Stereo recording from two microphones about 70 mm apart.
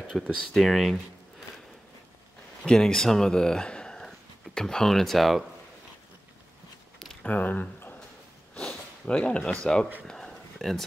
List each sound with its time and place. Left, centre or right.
0.1 s speech: centre
2.6 s a man's voice: centre
7.2 s speech: left
10.0 s a sound: centre